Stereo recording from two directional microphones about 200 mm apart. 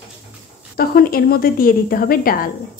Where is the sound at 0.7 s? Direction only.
50° left (ahead or behind).